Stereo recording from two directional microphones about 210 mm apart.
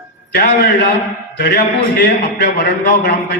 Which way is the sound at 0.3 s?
50° left (ahead or behind).